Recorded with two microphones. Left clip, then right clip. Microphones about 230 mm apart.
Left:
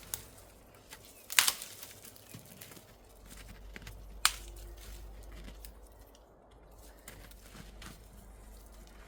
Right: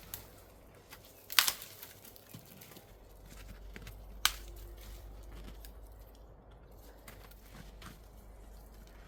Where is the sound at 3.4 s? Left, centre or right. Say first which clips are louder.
Left 2 dB; centre.